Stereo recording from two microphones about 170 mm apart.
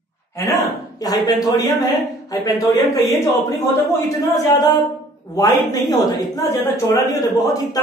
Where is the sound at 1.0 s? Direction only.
20° left (ahead or behind).